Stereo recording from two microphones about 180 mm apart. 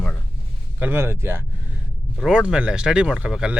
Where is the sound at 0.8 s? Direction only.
10° right (ahead or behind).